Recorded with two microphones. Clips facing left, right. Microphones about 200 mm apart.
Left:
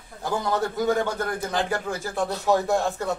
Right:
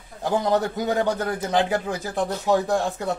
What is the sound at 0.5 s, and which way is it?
Speech, 20° right (ahead or behind).